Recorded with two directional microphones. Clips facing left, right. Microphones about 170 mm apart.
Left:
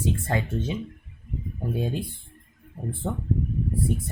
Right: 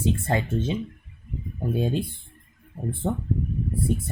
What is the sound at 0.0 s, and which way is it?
Speech, 25° right (ahead or behind).